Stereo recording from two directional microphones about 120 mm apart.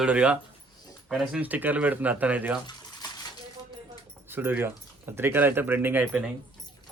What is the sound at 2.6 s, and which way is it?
Bathtub, 35° left (ahead or behind).